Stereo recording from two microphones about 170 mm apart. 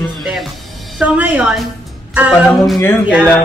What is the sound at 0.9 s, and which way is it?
A woman's voice, 10° right (ahead or behind).